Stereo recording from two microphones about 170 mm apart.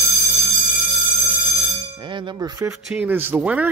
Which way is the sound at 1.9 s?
25° right (ahead or behind).